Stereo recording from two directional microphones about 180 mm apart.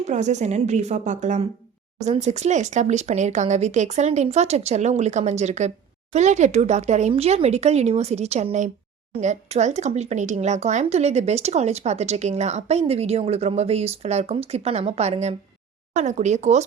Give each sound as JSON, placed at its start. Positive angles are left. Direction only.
{"t": 0.0, "sound": "speech", "side_deg": -40}